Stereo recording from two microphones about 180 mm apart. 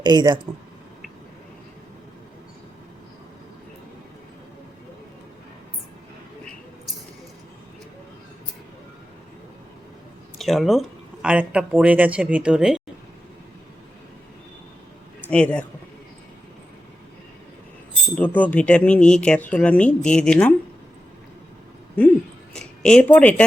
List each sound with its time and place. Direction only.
0.0 s speech: 25° right (ahead or behind)
10.3 s speech: centre (ahead or behind)
15.3 s speech: 5° left (ahead or behind)
18.3 s speech: 10° left (ahead or behind)
22.0 s speech: 10° left (ahead or behind)